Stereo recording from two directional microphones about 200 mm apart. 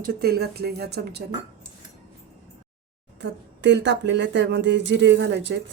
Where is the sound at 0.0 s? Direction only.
50° right (ahead or behind).